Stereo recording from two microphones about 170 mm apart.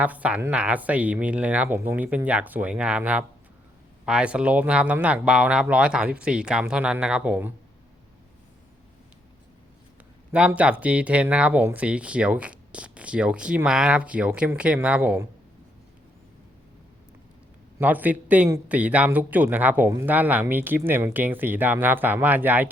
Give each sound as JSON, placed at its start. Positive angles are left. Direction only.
{"t": 0.0, "sound": "speech", "side_deg": -10}
{"t": 10.3, "sound": "speech", "side_deg": -10}
{"t": 17.7, "sound": "speech", "side_deg": -10}